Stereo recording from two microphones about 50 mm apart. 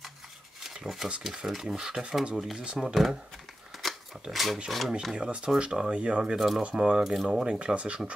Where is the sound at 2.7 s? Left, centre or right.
Centre.